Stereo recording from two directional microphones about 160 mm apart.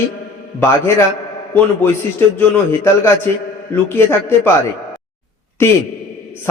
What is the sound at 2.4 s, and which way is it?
A man's voice, 15° left (ahead or behind).